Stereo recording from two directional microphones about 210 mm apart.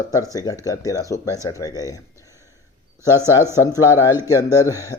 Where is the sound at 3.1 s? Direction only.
10° right (ahead or behind).